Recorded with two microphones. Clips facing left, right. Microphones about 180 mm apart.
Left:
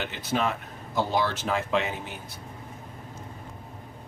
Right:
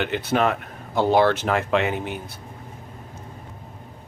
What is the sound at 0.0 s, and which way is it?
Speech, 60° right (ahead or behind).